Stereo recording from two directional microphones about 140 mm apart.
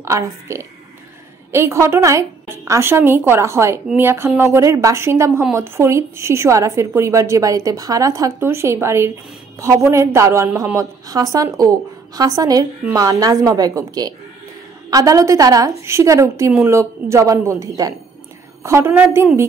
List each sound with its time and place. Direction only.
0.0 s a woman's voice: 20° right (ahead or behind)